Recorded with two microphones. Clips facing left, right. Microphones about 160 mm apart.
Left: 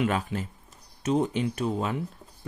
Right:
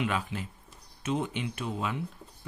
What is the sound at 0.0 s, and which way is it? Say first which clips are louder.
Speech: left 4 dB; 45° left (ahead or behind).